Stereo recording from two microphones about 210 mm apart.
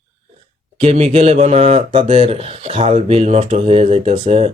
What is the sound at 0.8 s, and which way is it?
Speech, 30° right (ahead or behind).